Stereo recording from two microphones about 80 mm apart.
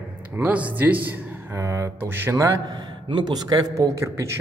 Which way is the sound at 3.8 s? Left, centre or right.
Right.